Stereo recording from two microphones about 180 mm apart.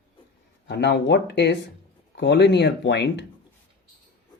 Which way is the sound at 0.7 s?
70° left (ahead or behind).